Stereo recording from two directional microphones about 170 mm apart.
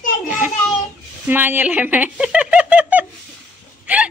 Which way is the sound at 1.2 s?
10° right (ahead or behind).